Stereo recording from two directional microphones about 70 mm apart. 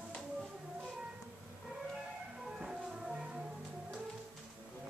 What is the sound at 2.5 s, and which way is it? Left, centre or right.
Music, centre.